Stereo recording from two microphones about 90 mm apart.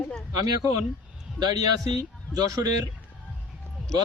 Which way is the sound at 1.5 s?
45° right (ahead or behind).